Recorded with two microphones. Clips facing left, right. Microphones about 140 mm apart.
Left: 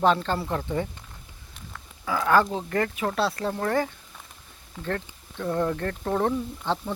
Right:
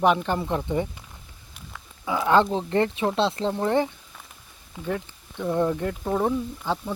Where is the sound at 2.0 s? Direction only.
20° right (ahead or behind).